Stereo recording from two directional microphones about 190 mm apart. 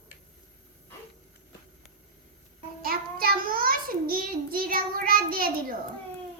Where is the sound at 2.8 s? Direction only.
50° right (ahead or behind).